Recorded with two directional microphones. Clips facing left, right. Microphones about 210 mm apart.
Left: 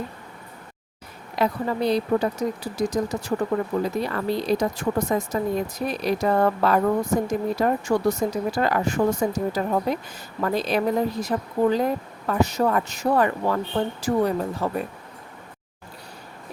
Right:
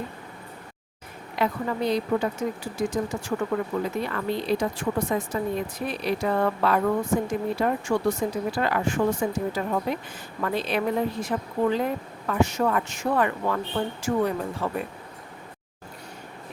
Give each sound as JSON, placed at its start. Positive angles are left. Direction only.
{"t": 1.4, "sound": "a woman's voice", "side_deg": 35}